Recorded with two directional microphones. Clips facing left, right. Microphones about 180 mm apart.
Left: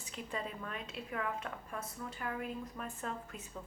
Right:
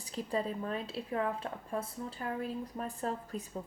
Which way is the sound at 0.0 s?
35° right (ahead or behind).